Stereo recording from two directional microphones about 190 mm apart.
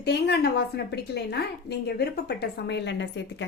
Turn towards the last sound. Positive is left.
turn(degrees=65)  # may be behind; listen again after turning